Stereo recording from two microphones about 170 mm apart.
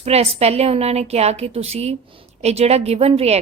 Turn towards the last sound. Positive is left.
turn(degrees=-35)  # may be behind; listen again after turning